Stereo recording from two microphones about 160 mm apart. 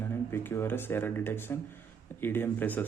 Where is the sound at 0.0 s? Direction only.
15° left (ahead or behind).